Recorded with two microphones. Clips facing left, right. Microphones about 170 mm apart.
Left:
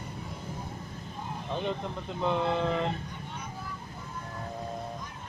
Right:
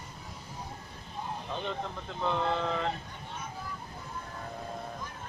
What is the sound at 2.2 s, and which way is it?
Speech, 15° left (ahead or behind).